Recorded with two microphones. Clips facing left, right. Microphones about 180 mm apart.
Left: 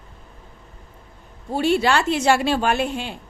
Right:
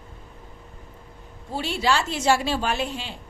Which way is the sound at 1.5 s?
55° left (ahead or behind).